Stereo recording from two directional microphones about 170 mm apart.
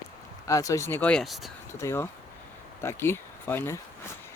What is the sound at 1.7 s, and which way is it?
Speech, 15° left (ahead or behind).